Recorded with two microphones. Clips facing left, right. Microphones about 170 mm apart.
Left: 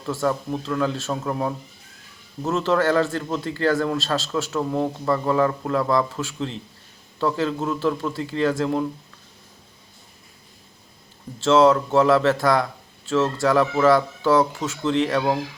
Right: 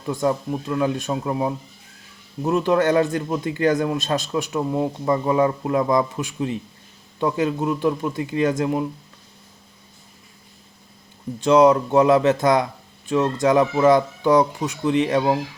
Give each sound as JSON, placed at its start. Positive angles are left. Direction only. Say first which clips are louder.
{"t": 0.0, "sound": "a man's voice", "louder": "right 2 dB", "side_deg": -15}
{"t": 11.3, "sound": "a man's voice", "louder": "right 1 dB", "side_deg": -15}